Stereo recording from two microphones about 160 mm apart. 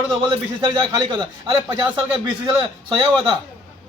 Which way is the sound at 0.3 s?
30° right (ahead or behind).